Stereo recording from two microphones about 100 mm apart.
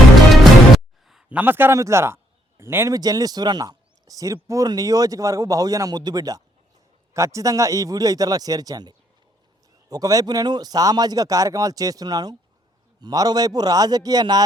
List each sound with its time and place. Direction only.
1.3 s a man's voice: 20° right (ahead or behind)
2.9 s speech: 40° right (ahead or behind)